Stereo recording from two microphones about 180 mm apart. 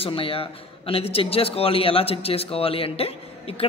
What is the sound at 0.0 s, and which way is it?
A man's voice, 30° left (ahead or behind).